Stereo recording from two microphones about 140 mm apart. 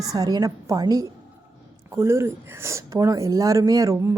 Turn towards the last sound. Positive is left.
turn(degrees=-25)  # may be behind; listen again after turning